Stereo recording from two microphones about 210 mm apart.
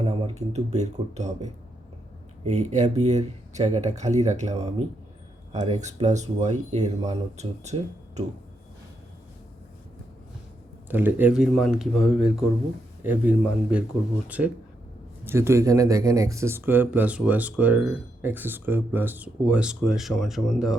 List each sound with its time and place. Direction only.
0.0 s speech: 30° right (ahead or behind)
10.8 s speech: 10° right (ahead or behind)